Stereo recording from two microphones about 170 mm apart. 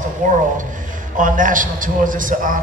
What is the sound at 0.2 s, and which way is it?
A man's voice, 50° right (ahead or behind).